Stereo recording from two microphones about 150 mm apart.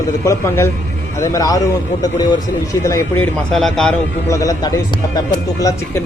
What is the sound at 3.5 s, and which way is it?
Speech, 5° left (ahead or behind).